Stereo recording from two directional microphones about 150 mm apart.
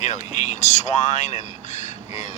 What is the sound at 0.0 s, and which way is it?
Speech, 50° left (ahead or behind).